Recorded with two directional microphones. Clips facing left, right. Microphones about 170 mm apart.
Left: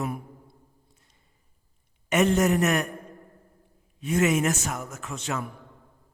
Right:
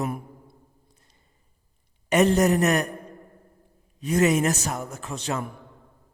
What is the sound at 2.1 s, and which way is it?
Speech, 35° right (ahead or behind).